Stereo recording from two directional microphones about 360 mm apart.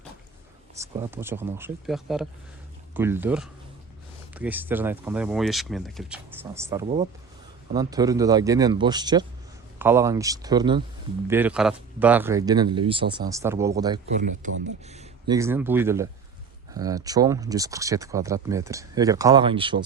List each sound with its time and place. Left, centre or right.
0.8 s speech: centre
6.8 s speech: centre